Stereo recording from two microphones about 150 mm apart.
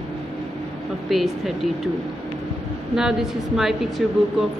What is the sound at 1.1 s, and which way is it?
Speech, centre (ahead or behind).